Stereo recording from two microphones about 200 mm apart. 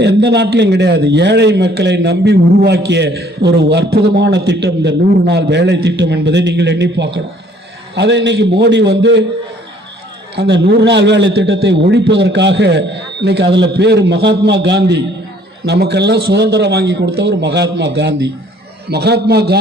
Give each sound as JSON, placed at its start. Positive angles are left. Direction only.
{"t": 0.0, "sound": "a man's voice", "side_deg": -60}
{"t": 10.3, "sound": "a man's voice", "side_deg": -60}